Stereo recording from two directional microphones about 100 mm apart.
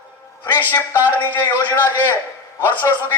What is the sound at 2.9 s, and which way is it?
Speech, 35° left (ahead or behind).